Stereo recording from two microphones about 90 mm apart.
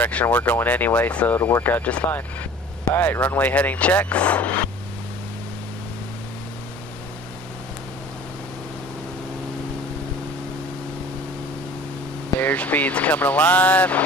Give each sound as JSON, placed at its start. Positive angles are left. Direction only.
{"t": 0.0, "sound": "speech", "side_deg": 15}
{"t": 12.4, "sound": "speech", "side_deg": 15}